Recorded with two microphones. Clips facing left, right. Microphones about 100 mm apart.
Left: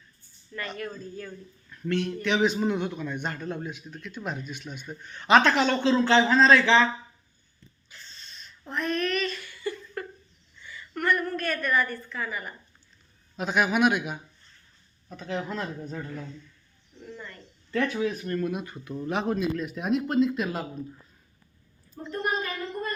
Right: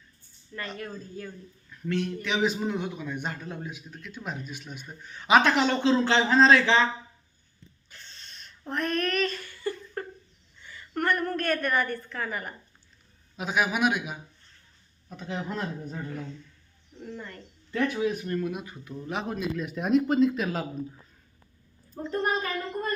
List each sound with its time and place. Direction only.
0.8 s speech: 25° right (ahead or behind)
1.7 s a man's voice: centre (ahead or behind); by 6.8 s 20° right (ahead or behind)
7.9 s a sound: 60° right (ahead or behind); by 10.0 s 45° right (ahead or behind)
10.6 s a woman's voice: 45° right (ahead or behind)
13.3 s a man's voice: 5° right (ahead or behind)
15.1 s a man's voice: 15° right (ahead or behind)
17.1 s speech: 50° right (ahead or behind)
17.7 s a man's voice: 10° right (ahead or behind)
18.4 s a man's voice: centre (ahead or behind)
22.0 s a woman's voice: 40° right (ahead or behind)